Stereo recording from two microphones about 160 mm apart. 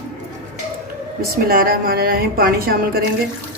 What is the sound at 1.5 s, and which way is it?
A woman's voice, 65° right (ahead or behind).